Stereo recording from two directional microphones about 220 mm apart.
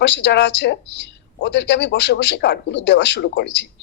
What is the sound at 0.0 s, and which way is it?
Speech, 50° left (ahead or behind).